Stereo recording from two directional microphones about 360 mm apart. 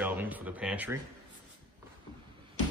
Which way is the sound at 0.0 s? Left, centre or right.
Centre.